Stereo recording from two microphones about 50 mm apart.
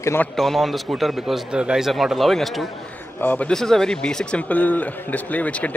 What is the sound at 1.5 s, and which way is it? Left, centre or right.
Speech, centre.